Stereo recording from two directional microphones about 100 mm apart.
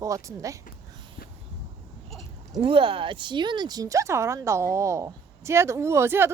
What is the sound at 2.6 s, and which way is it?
Speech, 65° right (ahead or behind).